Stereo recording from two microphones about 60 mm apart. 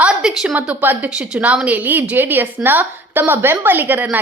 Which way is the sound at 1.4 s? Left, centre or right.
Right.